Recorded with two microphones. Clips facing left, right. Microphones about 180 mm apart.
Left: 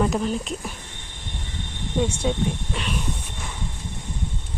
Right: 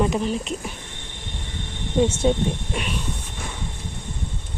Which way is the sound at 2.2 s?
30° right (ahead or behind).